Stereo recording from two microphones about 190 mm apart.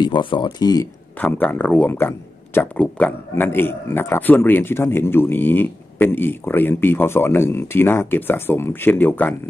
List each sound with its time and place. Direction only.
0.0 s speech: 25° left (ahead or behind)
1.2 s speech: 10° left (ahead or behind)